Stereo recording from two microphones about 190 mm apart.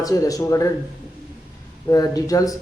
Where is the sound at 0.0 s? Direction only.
15° left (ahead or behind).